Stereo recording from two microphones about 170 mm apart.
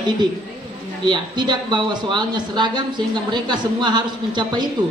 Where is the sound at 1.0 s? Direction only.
25° right (ahead or behind).